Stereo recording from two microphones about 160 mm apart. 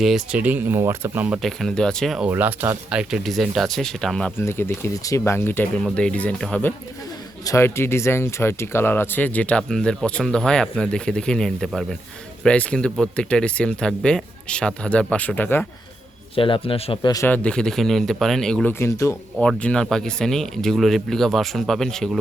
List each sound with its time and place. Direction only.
0.0 s speech: 5° right (ahead or behind)
1.4 s speech: centre (ahead or behind)
2.3 s speech: 10° right (ahead or behind); by 4.3 s 5° left (ahead or behind)
4.4 s speech: 15° left (ahead or behind)
16.3 s a man's voice: 35° left (ahead or behind)
17.2 s speech: 10° left (ahead or behind)
19.4 s speech: 5° left (ahead or behind)